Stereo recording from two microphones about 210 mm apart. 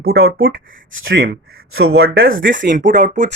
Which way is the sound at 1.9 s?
50° right (ahead or behind).